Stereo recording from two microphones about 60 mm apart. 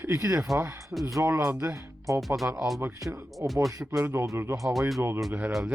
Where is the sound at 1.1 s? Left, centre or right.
Right.